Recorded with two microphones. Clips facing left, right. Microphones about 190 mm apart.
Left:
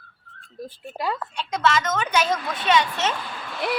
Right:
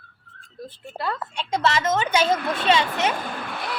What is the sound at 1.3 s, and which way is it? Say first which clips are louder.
A woman's voice: even; 30° right (ahead or behind).